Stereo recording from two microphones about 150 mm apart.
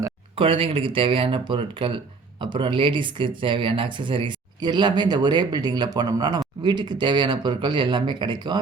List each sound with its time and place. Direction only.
0.3 s speech: 35° right (ahead or behind)